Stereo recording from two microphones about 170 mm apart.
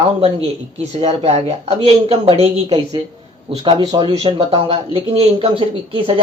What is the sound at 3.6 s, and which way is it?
A man's voice, 25° right (ahead or behind).